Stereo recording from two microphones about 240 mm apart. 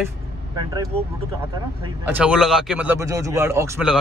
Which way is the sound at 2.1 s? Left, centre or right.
Centre.